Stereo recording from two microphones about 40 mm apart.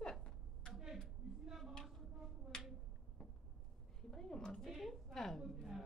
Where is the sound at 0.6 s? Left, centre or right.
Centre.